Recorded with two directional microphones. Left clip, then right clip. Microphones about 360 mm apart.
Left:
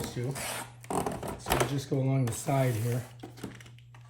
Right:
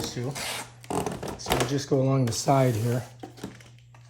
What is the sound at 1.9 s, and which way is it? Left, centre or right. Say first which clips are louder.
Speech: right 7 dB; centre.